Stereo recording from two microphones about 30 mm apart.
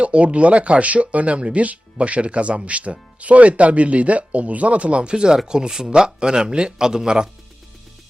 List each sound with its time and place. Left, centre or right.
0.0 s speech: right